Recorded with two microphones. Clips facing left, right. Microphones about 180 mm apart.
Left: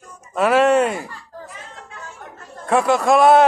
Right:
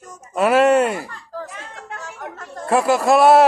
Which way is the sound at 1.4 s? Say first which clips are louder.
Right 3 dB; 80° right.